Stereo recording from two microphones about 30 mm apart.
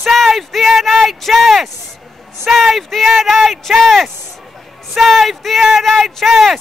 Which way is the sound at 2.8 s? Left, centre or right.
Centre.